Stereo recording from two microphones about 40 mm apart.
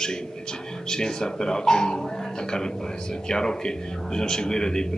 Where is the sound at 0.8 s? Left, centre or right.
Centre.